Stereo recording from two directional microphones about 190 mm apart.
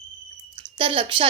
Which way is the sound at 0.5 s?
25° right (ahead or behind).